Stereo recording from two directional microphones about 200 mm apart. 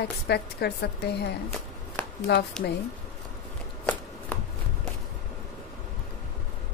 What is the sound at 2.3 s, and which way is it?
Speech, 55° left (ahead or behind).